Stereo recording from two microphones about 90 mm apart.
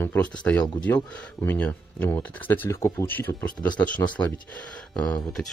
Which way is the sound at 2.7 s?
35° left (ahead or behind).